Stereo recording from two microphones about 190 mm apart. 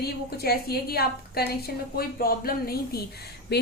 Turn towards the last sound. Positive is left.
turn(degrees=60)  # may be behind; listen again after turning